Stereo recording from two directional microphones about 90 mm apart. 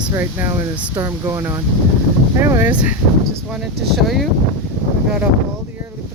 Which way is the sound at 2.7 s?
15° right (ahead or behind).